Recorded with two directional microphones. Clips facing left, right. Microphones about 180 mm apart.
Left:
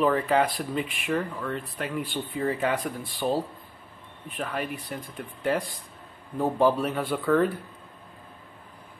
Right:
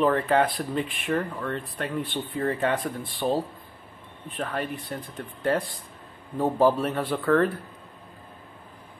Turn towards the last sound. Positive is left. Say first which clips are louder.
# right 1 dB
turn(degrees=0)  # may be behind; listen again after turning